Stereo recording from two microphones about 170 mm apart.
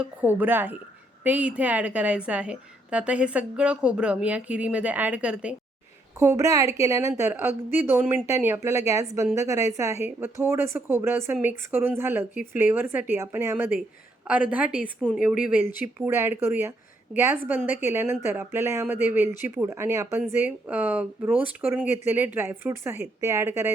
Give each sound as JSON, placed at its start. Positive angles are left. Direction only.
{"t": 0.0, "sound": "a woman's voice", "side_deg": -10}
{"t": 6.1, "sound": "a woman's voice", "side_deg": -15}